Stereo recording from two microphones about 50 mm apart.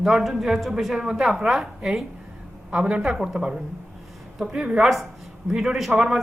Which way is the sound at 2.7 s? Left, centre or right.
Right.